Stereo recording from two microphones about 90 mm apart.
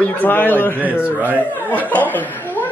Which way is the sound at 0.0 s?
20° left (ahead or behind).